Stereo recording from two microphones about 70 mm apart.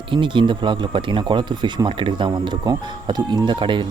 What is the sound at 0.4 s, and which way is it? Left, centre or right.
Speech, right.